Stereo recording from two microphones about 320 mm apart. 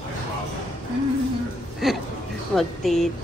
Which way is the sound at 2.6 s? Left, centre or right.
Centre.